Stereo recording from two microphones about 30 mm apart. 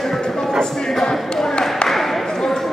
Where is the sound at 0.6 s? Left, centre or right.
Centre.